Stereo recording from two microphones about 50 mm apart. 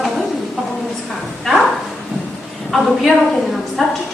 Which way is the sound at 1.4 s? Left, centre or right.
Centre.